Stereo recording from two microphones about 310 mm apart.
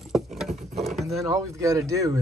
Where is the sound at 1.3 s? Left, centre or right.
Centre.